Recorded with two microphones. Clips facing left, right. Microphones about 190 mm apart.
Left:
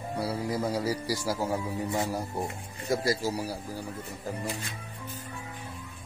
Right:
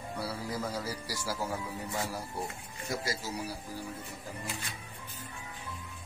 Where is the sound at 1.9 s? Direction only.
25° left (ahead or behind).